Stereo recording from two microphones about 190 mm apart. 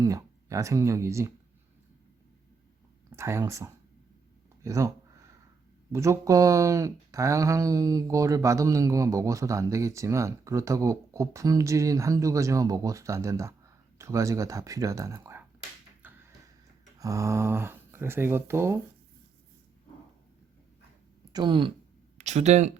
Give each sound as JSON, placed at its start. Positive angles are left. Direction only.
{"t": 0.0, "sound": "speech", "side_deg": -15}
{"t": 3.1, "sound": "speech", "side_deg": -15}
{"t": 5.9, "sound": "speech", "side_deg": -15}
{"t": 16.0, "sound": "a sound", "side_deg": -10}
{"t": 17.0, "sound": "speech", "side_deg": -15}
{"t": 21.3, "sound": "speech", "side_deg": -25}
{"t": 22.2, "sound": "speech", "side_deg": -35}